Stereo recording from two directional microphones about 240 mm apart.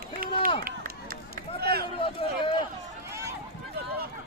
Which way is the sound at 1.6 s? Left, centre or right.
Right.